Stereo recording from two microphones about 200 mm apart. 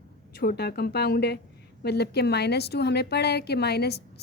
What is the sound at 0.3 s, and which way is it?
A woman's voice, 55° left (ahead or behind).